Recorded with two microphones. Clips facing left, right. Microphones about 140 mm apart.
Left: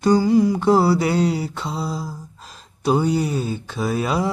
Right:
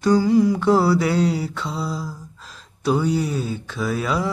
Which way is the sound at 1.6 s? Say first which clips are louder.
Left 1 dB; 25° left (ahead or behind).